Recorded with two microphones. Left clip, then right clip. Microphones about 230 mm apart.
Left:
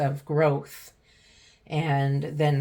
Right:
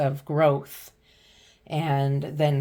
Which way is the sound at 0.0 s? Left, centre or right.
Right.